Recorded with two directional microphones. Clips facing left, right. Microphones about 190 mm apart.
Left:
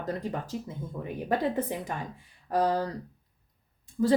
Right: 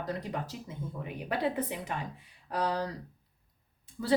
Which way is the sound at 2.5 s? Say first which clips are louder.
Left 5 dB; 45° left (ahead or behind).